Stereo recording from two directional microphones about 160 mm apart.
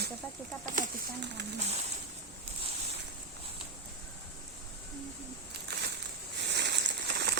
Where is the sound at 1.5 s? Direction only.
45° right (ahead or behind).